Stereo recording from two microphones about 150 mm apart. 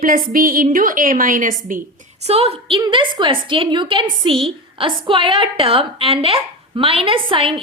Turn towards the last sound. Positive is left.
turn(degrees=-35)  # may be behind; listen again after turning